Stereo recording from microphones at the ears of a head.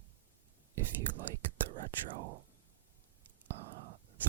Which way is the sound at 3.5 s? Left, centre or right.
Right.